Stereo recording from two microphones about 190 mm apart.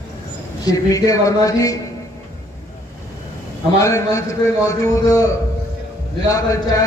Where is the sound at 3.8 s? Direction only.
15° left (ahead or behind).